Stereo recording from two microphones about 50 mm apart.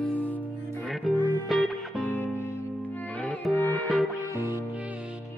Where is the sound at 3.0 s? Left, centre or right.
Left.